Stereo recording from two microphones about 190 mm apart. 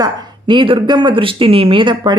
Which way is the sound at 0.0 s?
25° right (ahead or behind).